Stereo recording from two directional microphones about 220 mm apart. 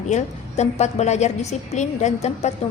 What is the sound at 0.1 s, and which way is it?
A woman's voice, 30° left (ahead or behind).